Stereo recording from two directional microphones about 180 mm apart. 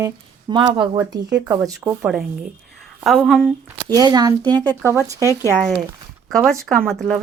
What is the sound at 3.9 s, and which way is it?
Speech, 20° right (ahead or behind).